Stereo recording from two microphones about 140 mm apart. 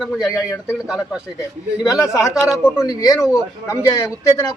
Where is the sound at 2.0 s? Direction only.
25° left (ahead or behind).